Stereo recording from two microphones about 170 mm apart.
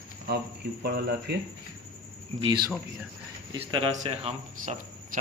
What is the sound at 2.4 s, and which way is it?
Speech, 25° right (ahead or behind).